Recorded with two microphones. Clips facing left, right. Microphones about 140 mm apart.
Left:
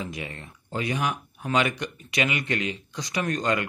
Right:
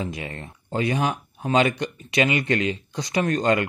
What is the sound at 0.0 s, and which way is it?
Speech, 30° right (ahead or behind).